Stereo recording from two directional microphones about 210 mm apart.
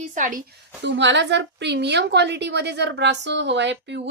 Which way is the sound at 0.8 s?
60° right (ahead or behind).